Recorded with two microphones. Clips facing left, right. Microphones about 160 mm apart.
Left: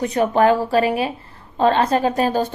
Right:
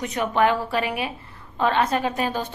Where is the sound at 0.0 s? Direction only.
35° left (ahead or behind).